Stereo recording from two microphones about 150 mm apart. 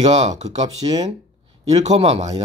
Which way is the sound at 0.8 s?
35° right (ahead or behind).